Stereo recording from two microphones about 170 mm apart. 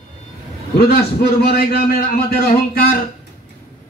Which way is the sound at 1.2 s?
65° left (ahead or behind).